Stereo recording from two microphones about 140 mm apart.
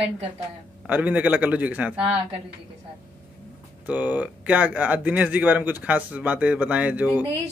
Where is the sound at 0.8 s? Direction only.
10° right (ahead or behind).